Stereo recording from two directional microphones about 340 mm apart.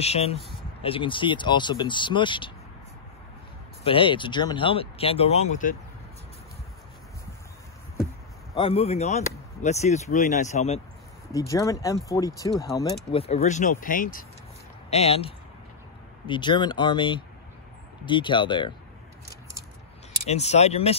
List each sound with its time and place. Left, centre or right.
0.0 s speech: centre
3.8 s speech: centre
8.5 s speech: centre
20.2 s speech: centre